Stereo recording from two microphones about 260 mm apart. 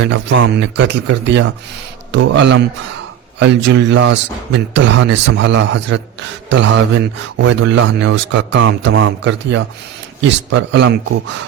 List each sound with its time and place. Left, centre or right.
0.0 s speech: right